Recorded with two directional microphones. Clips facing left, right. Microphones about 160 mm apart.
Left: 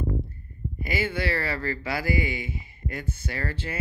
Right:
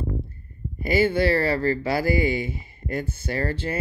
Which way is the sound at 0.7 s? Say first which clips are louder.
Right 8 dB; 35° right (ahead or behind).